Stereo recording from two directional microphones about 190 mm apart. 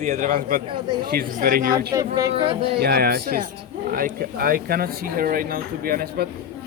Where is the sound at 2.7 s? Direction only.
55° right (ahead or behind).